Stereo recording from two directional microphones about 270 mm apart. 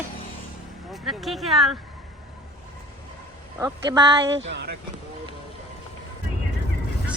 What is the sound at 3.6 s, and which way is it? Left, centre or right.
Speech, centre.